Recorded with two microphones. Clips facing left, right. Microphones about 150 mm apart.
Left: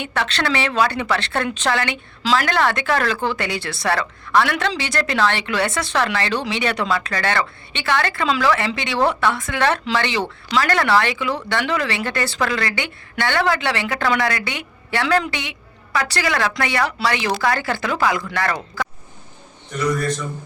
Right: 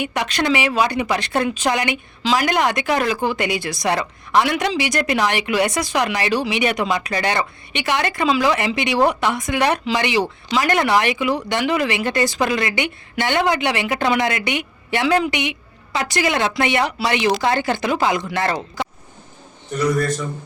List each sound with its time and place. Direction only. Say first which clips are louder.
0.0 s a woman's voice: right 2 dB; 15° right (ahead or behind)